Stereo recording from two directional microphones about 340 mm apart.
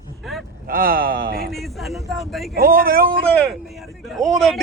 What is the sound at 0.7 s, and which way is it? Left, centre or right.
Speech, right.